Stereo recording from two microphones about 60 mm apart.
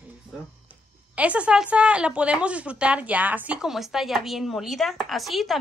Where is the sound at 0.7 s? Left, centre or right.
Right.